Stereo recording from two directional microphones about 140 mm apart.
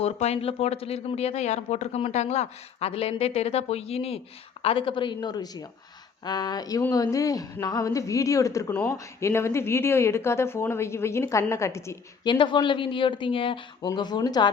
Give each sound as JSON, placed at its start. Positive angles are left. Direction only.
{"t": 0.0, "sound": "speech", "side_deg": 50}
{"t": 8.7, "sound": "speech", "side_deg": 10}
{"t": 12.2, "sound": "speech", "side_deg": 35}